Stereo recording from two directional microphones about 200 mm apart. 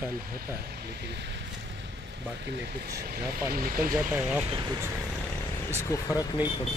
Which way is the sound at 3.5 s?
45° right (ahead or behind).